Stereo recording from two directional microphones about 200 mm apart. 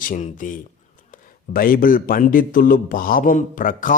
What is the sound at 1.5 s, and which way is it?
A man's voice, 45° left (ahead or behind).